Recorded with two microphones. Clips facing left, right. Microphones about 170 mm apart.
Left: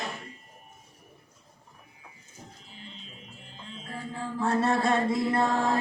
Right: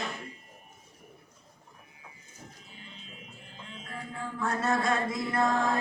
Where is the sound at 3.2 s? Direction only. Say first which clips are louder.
Left 3 dB; 30° left (ahead or behind).